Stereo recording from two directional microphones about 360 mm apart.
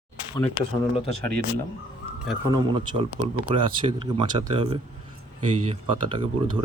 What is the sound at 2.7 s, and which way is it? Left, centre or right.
Speech, centre.